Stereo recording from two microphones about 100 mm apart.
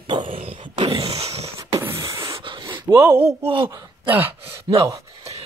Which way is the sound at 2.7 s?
25° right (ahead or behind).